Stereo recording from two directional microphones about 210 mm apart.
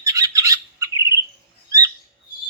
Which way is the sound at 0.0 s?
15° right (ahead or behind).